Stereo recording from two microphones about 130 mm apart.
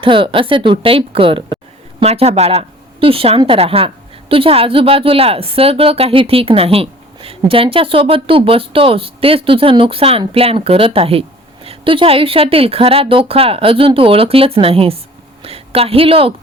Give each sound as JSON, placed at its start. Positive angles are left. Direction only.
{"t": 0.0, "sound": "a woman's voice", "side_deg": -40}